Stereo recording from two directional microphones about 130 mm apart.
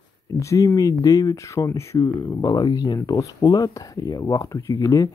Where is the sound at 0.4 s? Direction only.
25° left (ahead or behind).